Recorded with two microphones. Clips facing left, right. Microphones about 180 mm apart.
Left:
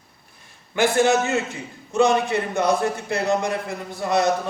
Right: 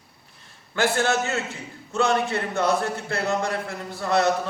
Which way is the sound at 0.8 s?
15° left (ahead or behind).